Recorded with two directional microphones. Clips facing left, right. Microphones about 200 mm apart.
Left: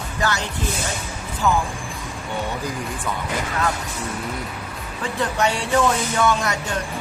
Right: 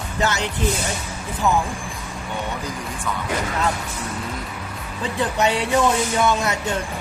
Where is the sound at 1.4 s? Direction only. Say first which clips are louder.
Even; 15° right (ahead or behind).